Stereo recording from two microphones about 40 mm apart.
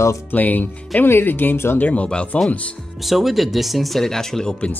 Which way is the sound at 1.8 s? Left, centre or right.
Left.